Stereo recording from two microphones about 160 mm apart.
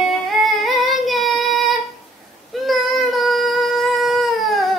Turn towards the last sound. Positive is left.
turn(degrees=0)  # may be behind; listen again after turning